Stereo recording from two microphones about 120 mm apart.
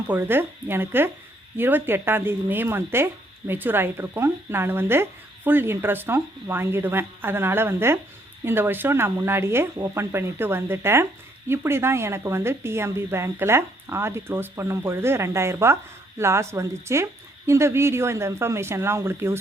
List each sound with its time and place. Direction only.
0.1 s speech: 20° right (ahead or behind)